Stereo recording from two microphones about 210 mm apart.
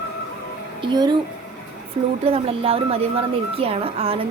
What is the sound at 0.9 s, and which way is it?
Speech, 20° right (ahead or behind).